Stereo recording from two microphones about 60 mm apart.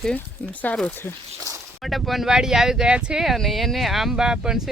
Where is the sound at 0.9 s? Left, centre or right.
Left.